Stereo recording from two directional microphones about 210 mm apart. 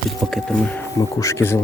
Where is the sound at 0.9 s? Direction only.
15° left (ahead or behind).